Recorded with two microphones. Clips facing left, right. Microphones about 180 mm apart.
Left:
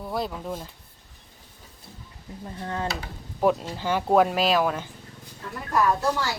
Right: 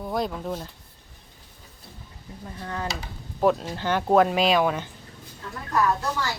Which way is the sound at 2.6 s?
25° left (ahead or behind).